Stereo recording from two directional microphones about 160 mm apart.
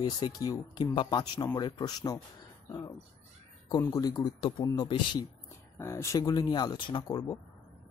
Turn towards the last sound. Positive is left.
turn(degrees=25)  # may be behind; listen again after turning